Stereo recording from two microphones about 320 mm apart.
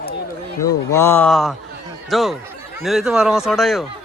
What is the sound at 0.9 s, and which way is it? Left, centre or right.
Speech, centre.